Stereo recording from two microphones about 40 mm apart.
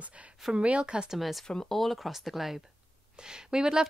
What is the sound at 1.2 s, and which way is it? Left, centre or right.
Speech, centre.